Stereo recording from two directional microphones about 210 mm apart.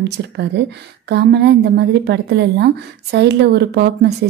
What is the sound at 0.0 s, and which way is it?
A woman's voice, 55° right (ahead or behind).